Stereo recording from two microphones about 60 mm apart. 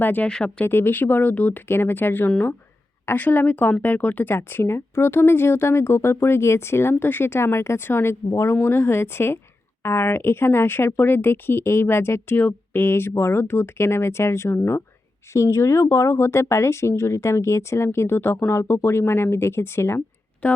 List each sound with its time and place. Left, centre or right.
0.0 s speech: left
0.3 s speech: centre
0.6 s speech: left
1.6 s speech: left
8.3 s speech: left
8.6 s speech: left
20.4 s speech: left